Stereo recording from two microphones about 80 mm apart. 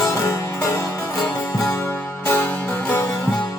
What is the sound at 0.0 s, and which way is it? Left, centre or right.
Music, left.